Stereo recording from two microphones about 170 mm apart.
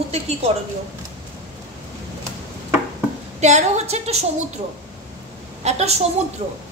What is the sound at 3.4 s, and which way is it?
Speech, 40° right (ahead or behind).